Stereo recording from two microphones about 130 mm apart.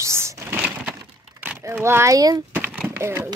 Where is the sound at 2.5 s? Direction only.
15° right (ahead or behind).